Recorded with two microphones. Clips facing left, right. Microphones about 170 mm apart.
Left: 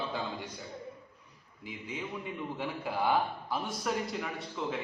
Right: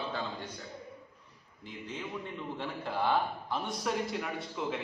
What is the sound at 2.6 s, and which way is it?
A man's voice, 10° left (ahead or behind).